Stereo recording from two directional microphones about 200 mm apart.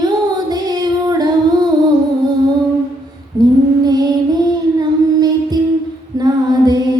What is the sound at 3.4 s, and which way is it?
Female singing, 20° right (ahead or behind).